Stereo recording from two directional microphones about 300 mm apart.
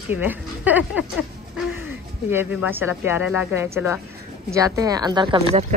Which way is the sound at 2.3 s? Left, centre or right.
Centre.